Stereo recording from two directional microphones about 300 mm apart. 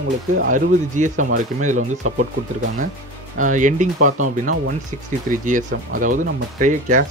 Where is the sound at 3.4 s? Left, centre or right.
Right.